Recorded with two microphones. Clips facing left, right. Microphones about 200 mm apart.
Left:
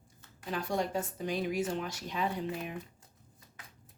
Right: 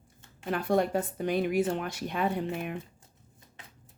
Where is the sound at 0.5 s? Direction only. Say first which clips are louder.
Right 6 dB; 55° right (ahead or behind).